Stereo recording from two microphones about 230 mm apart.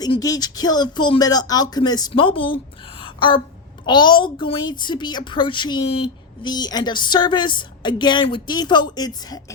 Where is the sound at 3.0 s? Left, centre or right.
Left.